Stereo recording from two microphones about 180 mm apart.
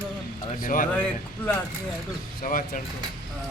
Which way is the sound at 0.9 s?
10° left (ahead or behind).